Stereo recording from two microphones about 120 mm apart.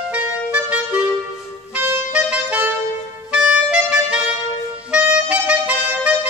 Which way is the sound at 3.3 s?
5° right (ahead or behind).